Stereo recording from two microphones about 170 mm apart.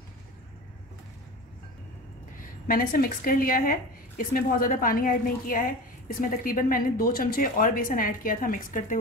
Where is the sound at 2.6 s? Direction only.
60° left (ahead or behind).